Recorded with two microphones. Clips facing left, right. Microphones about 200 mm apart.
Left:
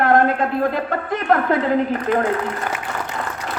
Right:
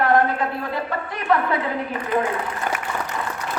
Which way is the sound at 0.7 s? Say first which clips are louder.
Left 4 dB; 50° left (ahead or behind).